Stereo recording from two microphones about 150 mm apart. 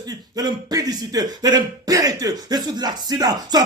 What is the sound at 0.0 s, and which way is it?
Speech, 25° right (ahead or behind).